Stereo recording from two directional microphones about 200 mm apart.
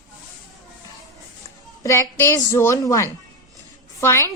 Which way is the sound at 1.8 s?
15° left (ahead or behind).